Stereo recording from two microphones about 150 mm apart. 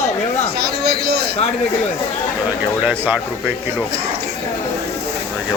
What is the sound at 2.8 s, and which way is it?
Speech, 10° right (ahead or behind).